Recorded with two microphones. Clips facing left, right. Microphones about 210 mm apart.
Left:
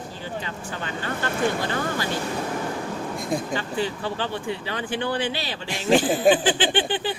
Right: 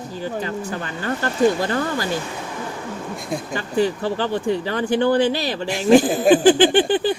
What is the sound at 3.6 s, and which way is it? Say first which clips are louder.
Speech: right 6 dB; 45° right (ahead or behind).